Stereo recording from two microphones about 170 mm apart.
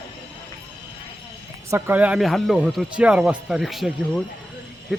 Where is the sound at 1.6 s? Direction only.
15° right (ahead or behind).